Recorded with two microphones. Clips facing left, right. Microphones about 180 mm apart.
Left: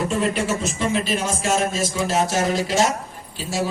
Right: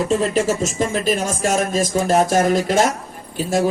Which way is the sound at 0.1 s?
35° right (ahead or behind).